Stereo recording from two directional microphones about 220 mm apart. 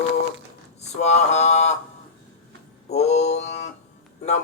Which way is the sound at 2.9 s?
30° left (ahead or behind).